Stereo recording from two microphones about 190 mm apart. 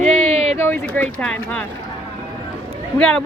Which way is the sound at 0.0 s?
35° right (ahead or behind).